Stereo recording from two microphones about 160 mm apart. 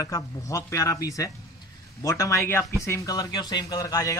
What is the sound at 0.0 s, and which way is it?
A man's voice, 20° left (ahead or behind).